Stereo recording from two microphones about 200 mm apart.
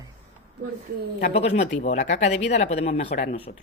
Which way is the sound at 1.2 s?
35° left (ahead or behind).